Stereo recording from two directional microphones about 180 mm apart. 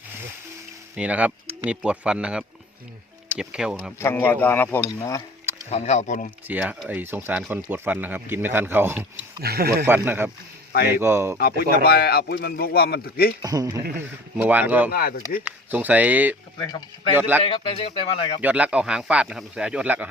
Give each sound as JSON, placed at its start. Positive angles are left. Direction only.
{"t": 0.9, "sound": "speech", "side_deg": -5}
{"t": 4.0, "sound": "speech", "side_deg": 10}
{"t": 5.7, "sound": "speech", "side_deg": 40}
{"t": 6.5, "sound": "speech", "side_deg": -10}
{"t": 9.4, "sound": "speech", "side_deg": -60}
{"t": 9.8, "sound": "speech", "side_deg": -10}
{"t": 11.3, "sound": "speech", "side_deg": 60}
{"t": 13.4, "sound": "speech", "side_deg": -20}
{"t": 14.4, "sound": "speech", "side_deg": -10}
{"t": 14.8, "sound": "speech", "side_deg": 55}
{"t": 15.4, "sound": "speech", "side_deg": -10}
{"t": 17.4, "sound": "speech", "side_deg": 30}
{"t": 18.4, "sound": "speech", "side_deg": -5}